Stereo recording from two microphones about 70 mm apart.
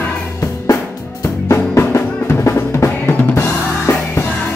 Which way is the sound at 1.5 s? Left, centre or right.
Left.